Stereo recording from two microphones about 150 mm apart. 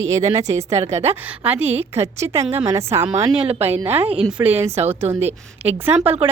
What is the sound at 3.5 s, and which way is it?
Speech, 45° right (ahead or behind).